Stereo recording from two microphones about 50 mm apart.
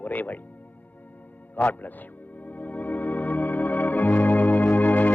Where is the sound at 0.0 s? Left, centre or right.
Left.